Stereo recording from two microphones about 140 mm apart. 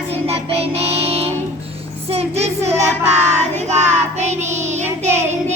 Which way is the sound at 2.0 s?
45° right (ahead or behind).